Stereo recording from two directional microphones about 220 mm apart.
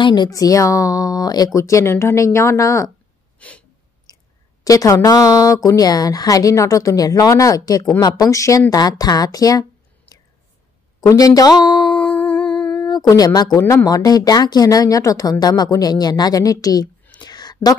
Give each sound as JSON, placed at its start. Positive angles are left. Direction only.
{"t": 0.0, "sound": "a woman's voice", "side_deg": 20}
{"t": 3.3, "sound": "gasp", "side_deg": 5}
{"t": 4.6, "sound": "a woman's voice", "side_deg": 15}
{"t": 11.0, "sound": "speech", "side_deg": 15}
{"t": 11.9, "sound": "humming", "side_deg": 5}
{"t": 12.8, "sound": "a woman's voice", "side_deg": 15}
{"t": 17.2, "sound": "a sound", "side_deg": 20}